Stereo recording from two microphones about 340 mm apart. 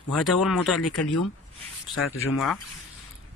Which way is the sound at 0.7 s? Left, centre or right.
Left.